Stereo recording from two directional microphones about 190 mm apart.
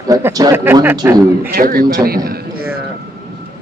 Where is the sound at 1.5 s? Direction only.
50° right (ahead or behind).